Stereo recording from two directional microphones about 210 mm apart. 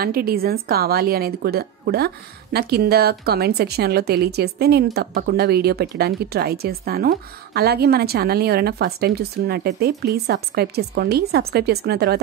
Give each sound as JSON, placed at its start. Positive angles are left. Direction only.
{"t": 0.0, "sound": "speech", "side_deg": -45}